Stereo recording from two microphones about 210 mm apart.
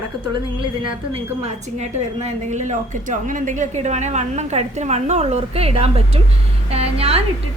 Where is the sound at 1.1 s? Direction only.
30° right (ahead or behind).